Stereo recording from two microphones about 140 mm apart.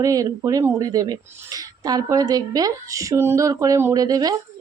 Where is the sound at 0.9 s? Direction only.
30° right (ahead or behind).